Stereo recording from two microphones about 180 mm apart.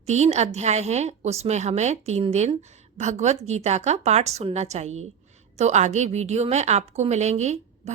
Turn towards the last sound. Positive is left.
turn(degrees=-40)  # may be behind; listen again after turning